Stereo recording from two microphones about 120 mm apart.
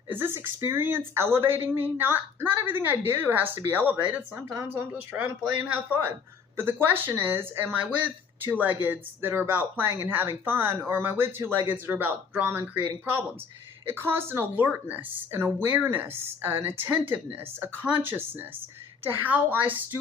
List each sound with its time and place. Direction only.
0.1 s speech: 20° right (ahead or behind)
3.9 s speech: 25° right (ahead or behind)
6.6 s speech: 20° right (ahead or behind)
13.8 s speech: 20° right (ahead or behind)